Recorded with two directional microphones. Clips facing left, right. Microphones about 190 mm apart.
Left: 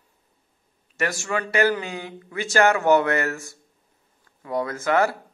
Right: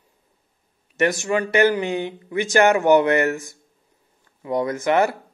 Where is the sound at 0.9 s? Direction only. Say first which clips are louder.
Right 6 dB; 20° right (ahead or behind).